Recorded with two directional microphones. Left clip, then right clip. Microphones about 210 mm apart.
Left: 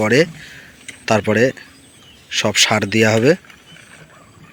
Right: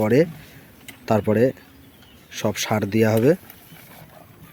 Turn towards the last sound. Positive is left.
turn(degrees=0)  # may be behind; listen again after turning